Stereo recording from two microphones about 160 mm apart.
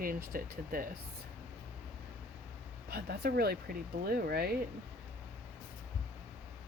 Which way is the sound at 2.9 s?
75° right (ahead or behind).